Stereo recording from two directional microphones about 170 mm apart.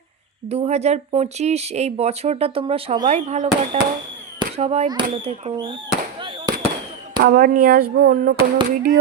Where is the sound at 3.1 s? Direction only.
40° right (ahead or behind).